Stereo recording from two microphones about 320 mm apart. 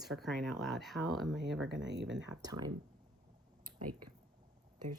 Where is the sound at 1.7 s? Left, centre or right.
Right.